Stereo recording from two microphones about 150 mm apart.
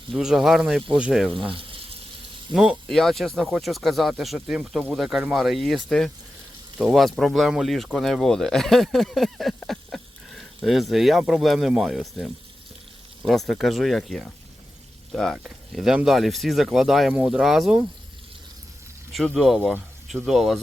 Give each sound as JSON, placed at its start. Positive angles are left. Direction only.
{"t": 0.1, "sound": "speech", "side_deg": -5}
{"t": 1.5, "sound": "frying", "side_deg": -35}
{"t": 2.5, "sound": "speech", "side_deg": 0}
{"t": 19.1, "sound": "speech", "side_deg": 0}